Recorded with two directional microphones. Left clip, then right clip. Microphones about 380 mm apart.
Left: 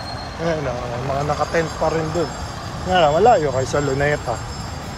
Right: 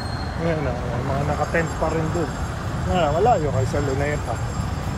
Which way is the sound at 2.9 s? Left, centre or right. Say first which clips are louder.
Left 5 dB; left.